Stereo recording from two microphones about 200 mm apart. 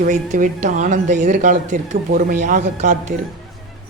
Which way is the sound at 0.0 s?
40° right (ahead or behind).